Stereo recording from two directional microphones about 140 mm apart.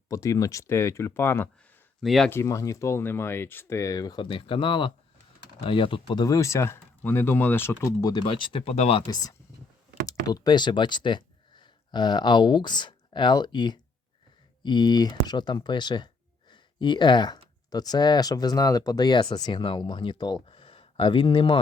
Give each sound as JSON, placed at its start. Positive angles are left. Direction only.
{"t": 0.1, "sound": "speech", "side_deg": 25}
{"t": 2.0, "sound": "speech", "side_deg": 0}
{"t": 2.3, "sound": "speech", "side_deg": 20}
{"t": 8.0, "sound": "speech", "side_deg": 35}
{"t": 8.7, "sound": "speech", "side_deg": 55}
{"t": 9.0, "sound": "speech", "side_deg": 25}
{"t": 16.5, "sound": "a sound", "side_deg": 35}
{"t": 17.7, "sound": "speech", "side_deg": 25}